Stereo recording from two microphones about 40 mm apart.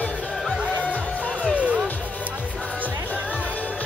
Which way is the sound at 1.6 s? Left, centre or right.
Right.